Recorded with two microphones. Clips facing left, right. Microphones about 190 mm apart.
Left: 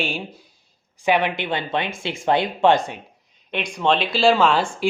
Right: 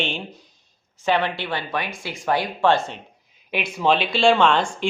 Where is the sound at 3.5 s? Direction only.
5° right (ahead or behind).